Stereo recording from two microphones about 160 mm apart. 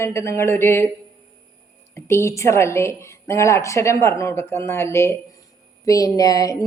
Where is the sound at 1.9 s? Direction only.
15° left (ahead or behind).